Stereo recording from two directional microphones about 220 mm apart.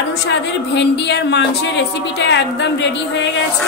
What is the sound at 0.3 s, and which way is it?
A woman's voice, 50° left (ahead or behind).